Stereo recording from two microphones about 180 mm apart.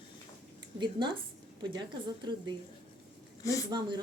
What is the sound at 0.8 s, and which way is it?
A woman's voice, 25° right (ahead or behind).